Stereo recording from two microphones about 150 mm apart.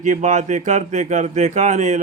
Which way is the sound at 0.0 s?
55° right (ahead or behind).